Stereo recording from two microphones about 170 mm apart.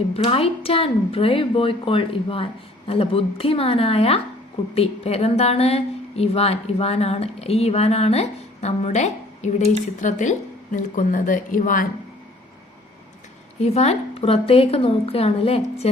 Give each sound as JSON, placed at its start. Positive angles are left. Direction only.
{"t": 0.1, "sound": "a woman's voice", "side_deg": 35}
{"t": 13.6, "sound": "speech", "side_deg": 40}